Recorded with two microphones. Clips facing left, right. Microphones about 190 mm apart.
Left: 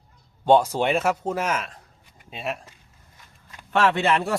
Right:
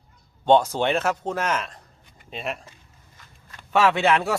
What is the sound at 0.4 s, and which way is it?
A man's voice, 5° left (ahead or behind).